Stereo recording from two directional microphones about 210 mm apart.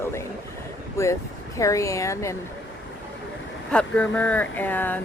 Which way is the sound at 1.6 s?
15° left (ahead or behind).